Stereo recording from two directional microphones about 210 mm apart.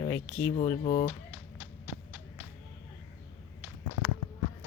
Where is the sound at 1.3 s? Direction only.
10° right (ahead or behind).